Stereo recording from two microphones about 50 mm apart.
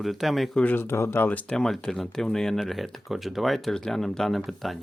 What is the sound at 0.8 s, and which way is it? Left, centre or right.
Speech, left.